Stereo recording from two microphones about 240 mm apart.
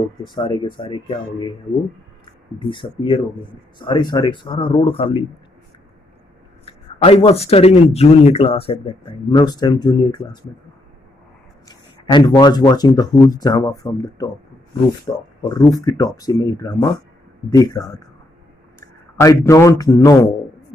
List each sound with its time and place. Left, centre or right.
0.3 s speech: centre
2.6 s speech: left
6.6 s speech: left
11.6 s a man's voice: centre